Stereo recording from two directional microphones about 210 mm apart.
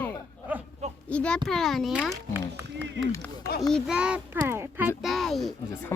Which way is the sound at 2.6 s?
55° right (ahead or behind).